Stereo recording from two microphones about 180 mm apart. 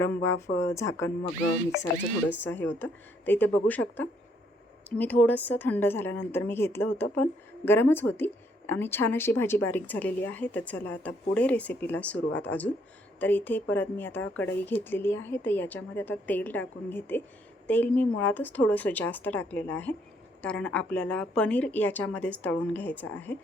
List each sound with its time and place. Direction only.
0.0 s a woman's voice: 15° left (ahead or behind)
2.4 s a woman's voice: 10° left (ahead or behind)